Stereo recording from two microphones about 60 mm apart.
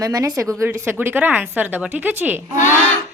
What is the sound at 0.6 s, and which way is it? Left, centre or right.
Speech, right.